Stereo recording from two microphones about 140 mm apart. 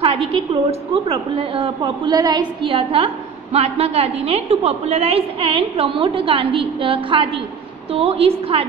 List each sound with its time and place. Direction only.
0.0 s a woman's voice: 45° right (ahead or behind)